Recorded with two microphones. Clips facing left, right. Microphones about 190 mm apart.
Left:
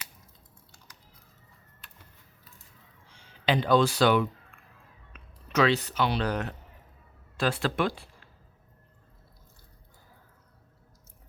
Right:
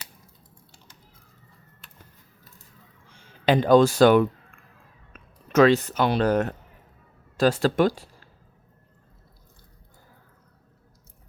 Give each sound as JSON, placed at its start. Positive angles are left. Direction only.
{"t": 3.1, "sound": "speech", "side_deg": -50}